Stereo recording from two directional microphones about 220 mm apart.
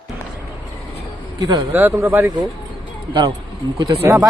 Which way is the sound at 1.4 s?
20° right (ahead or behind).